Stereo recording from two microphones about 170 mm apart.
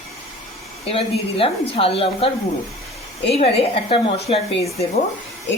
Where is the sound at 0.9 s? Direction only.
35° left (ahead or behind).